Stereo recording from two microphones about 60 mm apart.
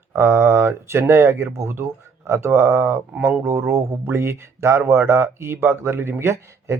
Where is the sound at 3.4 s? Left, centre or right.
Right.